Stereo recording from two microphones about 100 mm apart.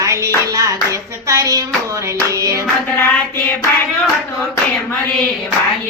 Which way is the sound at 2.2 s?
35° right (ahead or behind).